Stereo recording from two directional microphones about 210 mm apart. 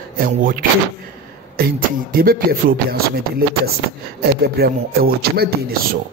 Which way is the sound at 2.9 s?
45° right (ahead or behind).